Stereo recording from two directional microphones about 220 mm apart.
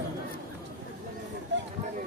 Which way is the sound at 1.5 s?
55° right (ahead or behind).